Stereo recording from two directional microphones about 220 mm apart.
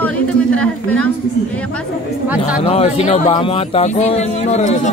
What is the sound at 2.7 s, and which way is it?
Speech, 25° left (ahead or behind).